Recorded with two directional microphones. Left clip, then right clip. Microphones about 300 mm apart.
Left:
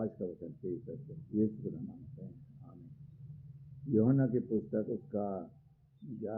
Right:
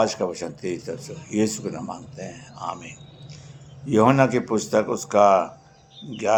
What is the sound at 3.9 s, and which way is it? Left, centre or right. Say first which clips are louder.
Speech: right 14 dB; right.